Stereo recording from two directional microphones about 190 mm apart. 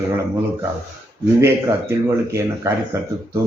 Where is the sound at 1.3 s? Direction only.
15° right (ahead or behind).